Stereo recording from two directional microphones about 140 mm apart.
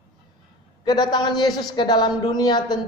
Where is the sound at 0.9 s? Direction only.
30° left (ahead or behind).